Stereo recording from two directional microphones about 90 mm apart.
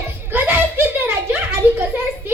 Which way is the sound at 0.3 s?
25° right (ahead or behind).